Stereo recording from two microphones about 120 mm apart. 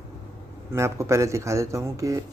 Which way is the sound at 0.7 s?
25° right (ahead or behind).